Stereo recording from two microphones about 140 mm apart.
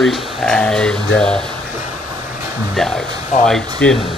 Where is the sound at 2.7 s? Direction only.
5° left (ahead or behind).